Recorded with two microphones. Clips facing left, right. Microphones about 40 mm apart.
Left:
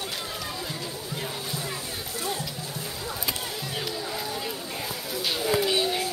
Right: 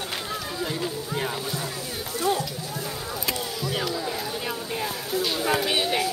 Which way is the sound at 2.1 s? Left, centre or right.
Right.